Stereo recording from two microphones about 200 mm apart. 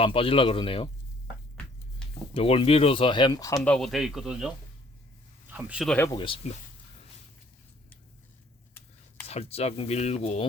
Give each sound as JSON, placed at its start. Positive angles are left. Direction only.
{"t": 0.0, "sound": "speech", "side_deg": 25}
{"t": 2.3, "sound": "speech", "side_deg": 30}
{"t": 6.0, "sound": "speech", "side_deg": 20}
{"t": 9.2, "sound": "speech", "side_deg": 30}